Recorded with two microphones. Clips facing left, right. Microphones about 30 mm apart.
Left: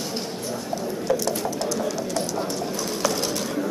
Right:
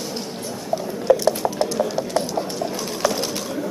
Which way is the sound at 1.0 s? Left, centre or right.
Right.